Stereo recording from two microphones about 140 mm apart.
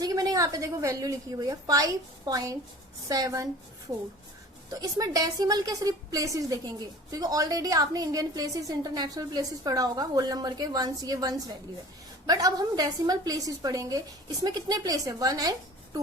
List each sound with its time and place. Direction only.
0.0 s a woman's voice: 25° right (ahead or behind)
4.7 s a woman's voice: 25° right (ahead or behind)